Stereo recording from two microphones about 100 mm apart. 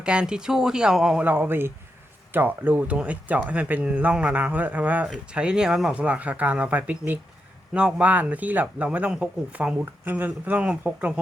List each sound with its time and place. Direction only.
0.0 s speech: 10° right (ahead or behind)
1.2 s speech: 20° right (ahead or behind)